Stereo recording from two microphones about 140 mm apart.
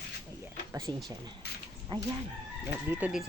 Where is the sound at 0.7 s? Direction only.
25° right (ahead or behind).